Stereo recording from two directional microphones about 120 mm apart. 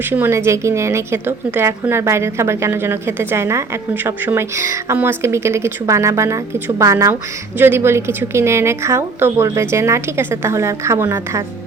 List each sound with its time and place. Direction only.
0.0 s a woman's voice: 20° right (ahead or behind)